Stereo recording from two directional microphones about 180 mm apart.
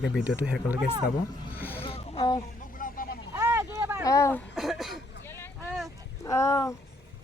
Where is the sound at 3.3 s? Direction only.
10° right (ahead or behind).